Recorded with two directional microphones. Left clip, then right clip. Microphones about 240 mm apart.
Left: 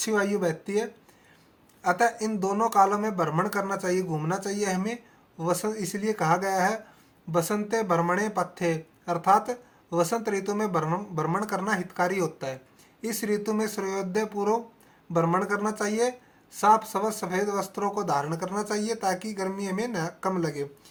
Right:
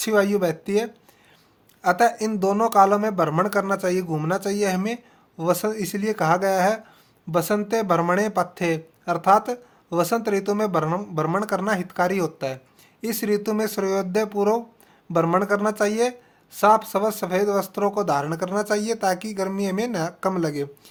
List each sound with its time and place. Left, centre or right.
0.0 s speech: right